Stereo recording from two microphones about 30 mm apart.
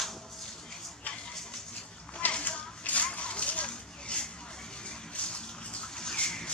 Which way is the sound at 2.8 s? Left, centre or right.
Left.